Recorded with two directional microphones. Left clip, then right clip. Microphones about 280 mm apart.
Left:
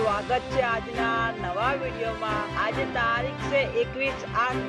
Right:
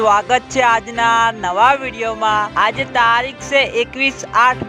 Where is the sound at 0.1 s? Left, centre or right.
Right.